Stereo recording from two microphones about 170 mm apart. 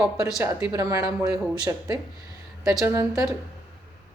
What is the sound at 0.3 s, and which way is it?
A man's voice, 20° right (ahead or behind).